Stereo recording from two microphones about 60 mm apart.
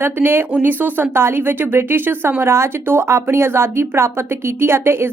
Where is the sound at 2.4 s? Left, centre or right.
Right.